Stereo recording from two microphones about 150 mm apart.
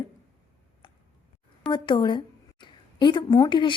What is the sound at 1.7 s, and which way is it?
Speech, 30° left (ahead or behind).